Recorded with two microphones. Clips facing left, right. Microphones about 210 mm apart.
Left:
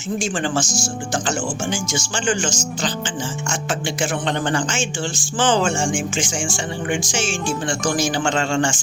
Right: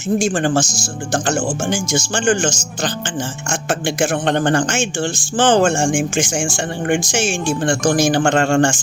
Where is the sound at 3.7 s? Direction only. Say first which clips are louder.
Right 6 dB; 60° right (ahead or behind).